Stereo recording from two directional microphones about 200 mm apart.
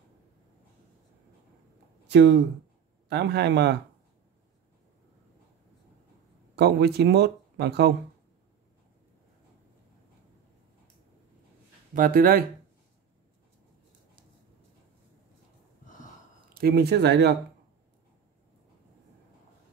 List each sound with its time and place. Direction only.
2.0 s speech: 60° right (ahead or behind)
6.5 s speech: 55° right (ahead or behind)
11.9 s speech: 45° right (ahead or behind)
16.5 s speech: 50° right (ahead or behind)